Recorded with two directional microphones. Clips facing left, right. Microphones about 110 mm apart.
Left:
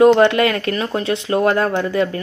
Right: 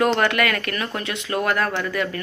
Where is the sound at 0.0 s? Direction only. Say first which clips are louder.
Left 8 dB; 25° left (ahead or behind).